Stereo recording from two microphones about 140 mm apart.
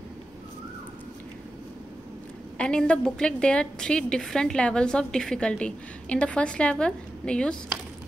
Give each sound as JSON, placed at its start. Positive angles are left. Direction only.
{"t": 2.5, "sound": "a woman's voice", "side_deg": 10}